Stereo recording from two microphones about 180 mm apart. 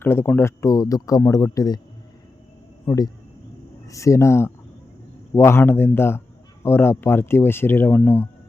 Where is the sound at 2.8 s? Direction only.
20° left (ahead or behind).